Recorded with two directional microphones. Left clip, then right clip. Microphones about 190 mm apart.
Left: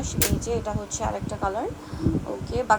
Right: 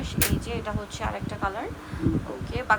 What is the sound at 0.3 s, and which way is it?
A woman's voice, 25° left (ahead or behind).